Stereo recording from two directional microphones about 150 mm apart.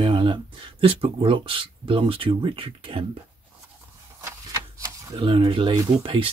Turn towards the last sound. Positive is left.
turn(degrees=-35)  # may be behind; listen again after turning